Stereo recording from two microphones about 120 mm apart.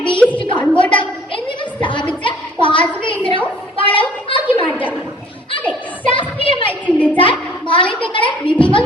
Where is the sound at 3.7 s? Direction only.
45° left (ahead or behind).